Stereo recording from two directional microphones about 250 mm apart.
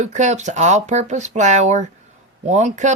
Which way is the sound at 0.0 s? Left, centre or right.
Right.